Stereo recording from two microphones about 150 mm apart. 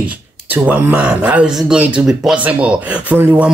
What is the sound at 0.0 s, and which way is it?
Speech, 10° right (ahead or behind).